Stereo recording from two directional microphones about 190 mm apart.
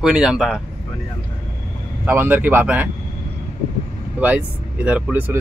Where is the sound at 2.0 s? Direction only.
10° right (ahead or behind).